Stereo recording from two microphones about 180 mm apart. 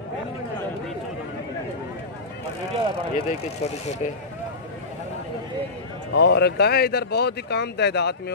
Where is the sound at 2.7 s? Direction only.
35° right (ahead or behind).